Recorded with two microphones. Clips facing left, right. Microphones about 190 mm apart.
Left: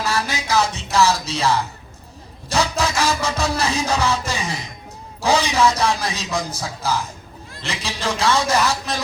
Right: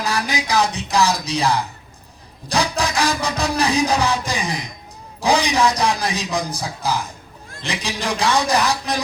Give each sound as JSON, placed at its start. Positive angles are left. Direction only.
{"t": 0.0, "sound": "music", "side_deg": -15}